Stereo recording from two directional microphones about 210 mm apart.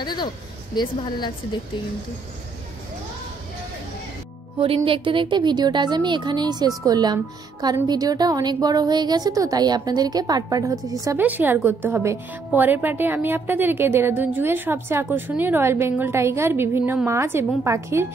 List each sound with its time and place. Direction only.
0.0 s a sound: 20° left (ahead or behind)
0.7 s a woman's voice: 20° left (ahead or behind)
4.8 s a woman's voice: 25° right (ahead or behind)